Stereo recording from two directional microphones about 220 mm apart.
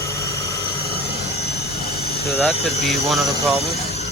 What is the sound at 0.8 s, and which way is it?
Vehicle, 45° left (ahead or behind).